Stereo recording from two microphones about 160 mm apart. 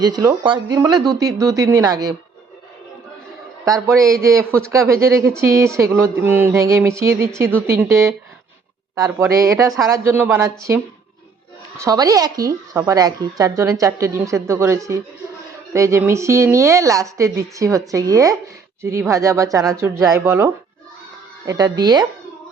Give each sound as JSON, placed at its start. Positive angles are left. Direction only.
{"t": 0.0, "sound": "a woman's voice", "side_deg": -25}
{"t": 3.8, "sound": "a woman's voice", "side_deg": -20}
{"t": 11.8, "sound": "a woman's voice", "side_deg": -20}